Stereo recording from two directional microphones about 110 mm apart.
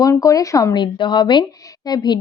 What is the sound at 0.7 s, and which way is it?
Speech, 45° left (ahead or behind).